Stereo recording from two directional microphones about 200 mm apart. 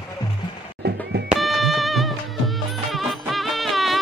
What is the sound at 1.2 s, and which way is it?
Music, centre (ahead or behind).